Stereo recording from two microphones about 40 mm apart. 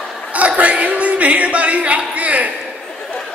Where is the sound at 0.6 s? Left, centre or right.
Right.